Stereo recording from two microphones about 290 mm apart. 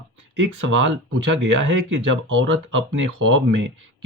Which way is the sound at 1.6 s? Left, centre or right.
Right.